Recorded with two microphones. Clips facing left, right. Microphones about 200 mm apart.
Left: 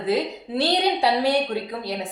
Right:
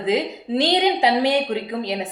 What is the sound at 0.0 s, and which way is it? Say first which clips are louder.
Speech: right 2 dB; 15° right (ahead or behind).